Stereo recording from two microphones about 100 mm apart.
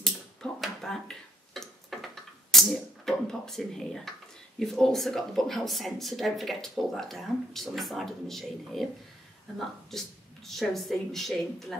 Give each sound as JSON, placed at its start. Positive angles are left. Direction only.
{"t": 0.0, "sound": "tick-tock", "side_deg": 5}
{"t": 2.5, "sound": "a sound", "side_deg": 5}
{"t": 4.6, "sound": "speech", "side_deg": 5}
{"t": 9.8, "sound": "speech", "side_deg": 0}